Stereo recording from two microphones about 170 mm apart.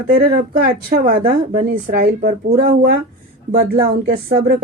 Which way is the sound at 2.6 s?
55° right (ahead or behind).